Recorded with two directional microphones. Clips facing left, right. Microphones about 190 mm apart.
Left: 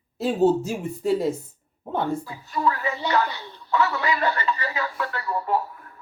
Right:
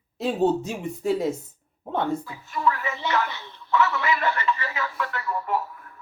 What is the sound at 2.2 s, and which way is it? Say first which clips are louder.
Speech: left 1 dB; 35° left (ahead or behind).